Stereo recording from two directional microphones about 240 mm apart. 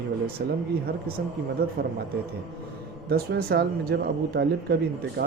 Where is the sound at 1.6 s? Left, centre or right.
Right.